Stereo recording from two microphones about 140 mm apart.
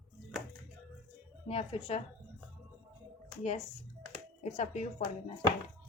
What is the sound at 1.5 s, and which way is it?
Speech, 45° left (ahead or behind).